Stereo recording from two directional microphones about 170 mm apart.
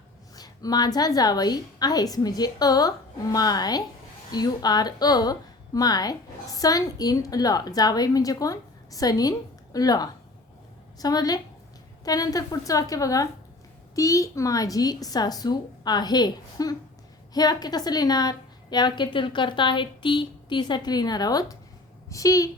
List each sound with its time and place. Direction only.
0.3 s a woman's voice: 25° left (ahead or behind)